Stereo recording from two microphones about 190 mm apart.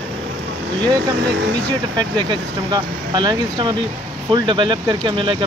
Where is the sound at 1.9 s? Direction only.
25° right (ahead or behind).